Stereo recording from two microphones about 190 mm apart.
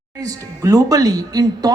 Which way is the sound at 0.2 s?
20° right (ahead or behind).